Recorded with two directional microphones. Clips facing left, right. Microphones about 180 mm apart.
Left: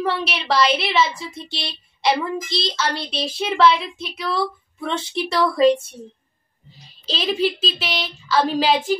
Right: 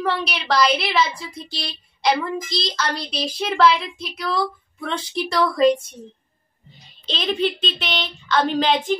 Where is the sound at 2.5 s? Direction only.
5° left (ahead or behind).